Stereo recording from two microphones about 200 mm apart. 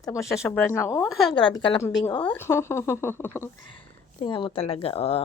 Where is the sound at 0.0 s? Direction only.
15° left (ahead or behind).